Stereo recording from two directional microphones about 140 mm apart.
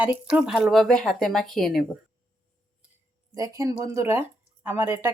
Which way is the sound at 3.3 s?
25° right (ahead or behind).